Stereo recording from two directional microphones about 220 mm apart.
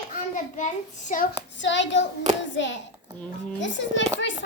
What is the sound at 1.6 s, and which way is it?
Hands, 55° left (ahead or behind).